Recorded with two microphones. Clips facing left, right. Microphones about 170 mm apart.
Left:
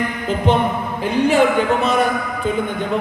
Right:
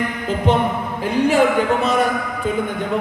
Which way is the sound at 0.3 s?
25° left (ahead or behind).